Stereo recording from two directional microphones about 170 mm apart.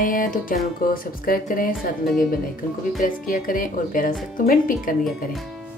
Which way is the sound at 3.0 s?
55° left (ahead or behind).